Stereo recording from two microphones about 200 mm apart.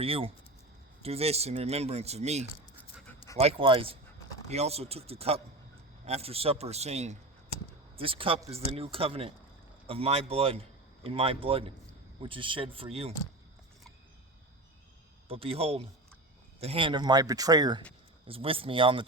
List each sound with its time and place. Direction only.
0.0 s a man's voice: 30° right (ahead or behind)
15.3 s speech: 30° right (ahead or behind)